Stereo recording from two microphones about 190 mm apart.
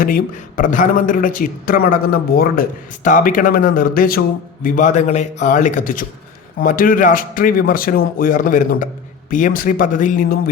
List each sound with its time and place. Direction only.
0.0 s a man's voice: 45° left (ahead or behind)